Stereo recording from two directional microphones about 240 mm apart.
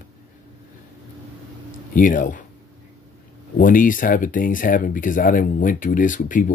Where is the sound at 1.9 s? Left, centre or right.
Left.